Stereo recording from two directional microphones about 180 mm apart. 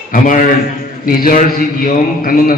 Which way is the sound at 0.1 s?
45° left (ahead or behind).